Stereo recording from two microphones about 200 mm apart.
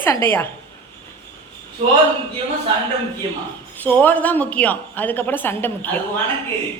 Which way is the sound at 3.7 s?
10° left (ahead or behind).